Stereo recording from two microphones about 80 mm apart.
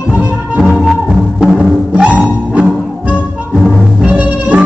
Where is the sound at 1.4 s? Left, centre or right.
Centre.